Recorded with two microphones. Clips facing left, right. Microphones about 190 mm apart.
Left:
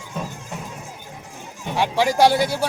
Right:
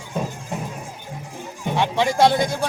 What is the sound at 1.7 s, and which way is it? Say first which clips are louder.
Speech: left 1 dB; 10° left (ahead or behind).